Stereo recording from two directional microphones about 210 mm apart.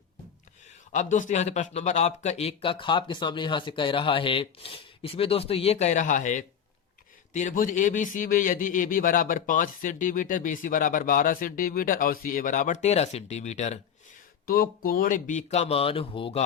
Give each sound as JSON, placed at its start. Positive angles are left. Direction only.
{"t": 0.9, "sound": "a man's voice", "side_deg": 35}
{"t": 14.4, "sound": "a man's voice", "side_deg": 45}